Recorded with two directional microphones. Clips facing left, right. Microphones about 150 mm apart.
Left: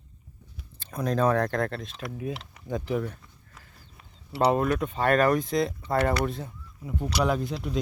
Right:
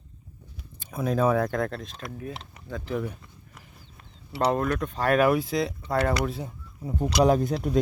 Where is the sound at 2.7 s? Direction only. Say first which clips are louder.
Left 5 dB; 15° left (ahead or behind).